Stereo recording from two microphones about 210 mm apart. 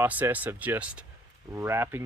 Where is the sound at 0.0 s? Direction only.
10° right (ahead or behind).